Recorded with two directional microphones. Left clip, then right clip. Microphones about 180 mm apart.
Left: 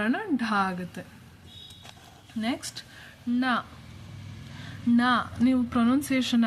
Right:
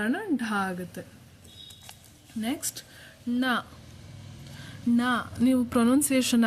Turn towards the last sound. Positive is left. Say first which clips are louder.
# right 2 dB
turn(degrees=-40)  # may be behind; listen again after turning